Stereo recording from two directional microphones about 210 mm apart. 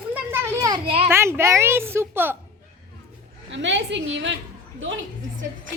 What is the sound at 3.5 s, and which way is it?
Speech, 60° right (ahead or behind).